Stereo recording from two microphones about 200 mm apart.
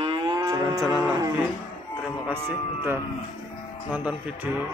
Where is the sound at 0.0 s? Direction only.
25° right (ahead or behind).